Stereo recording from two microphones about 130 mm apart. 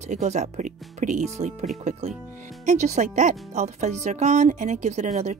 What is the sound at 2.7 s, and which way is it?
Speech, 65° right (ahead or behind).